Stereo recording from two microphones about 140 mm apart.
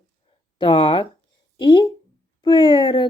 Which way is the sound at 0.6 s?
40° left (ahead or behind).